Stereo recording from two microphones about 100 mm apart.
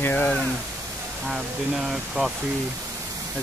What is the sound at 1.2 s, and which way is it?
Speech, 5° right (ahead or behind).